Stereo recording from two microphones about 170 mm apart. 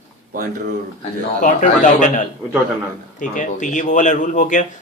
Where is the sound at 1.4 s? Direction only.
50° left (ahead or behind).